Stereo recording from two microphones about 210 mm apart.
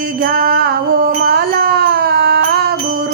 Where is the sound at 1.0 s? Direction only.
45° right (ahead or behind).